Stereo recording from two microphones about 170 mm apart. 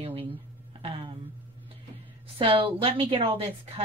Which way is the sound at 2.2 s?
35° right (ahead or behind).